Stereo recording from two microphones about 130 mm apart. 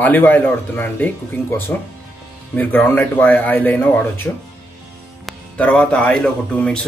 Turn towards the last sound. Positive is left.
turn(degrees=5)  # may be behind; listen again after turning